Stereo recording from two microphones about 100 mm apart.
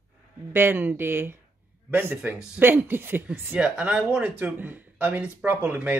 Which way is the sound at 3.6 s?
10° right (ahead or behind).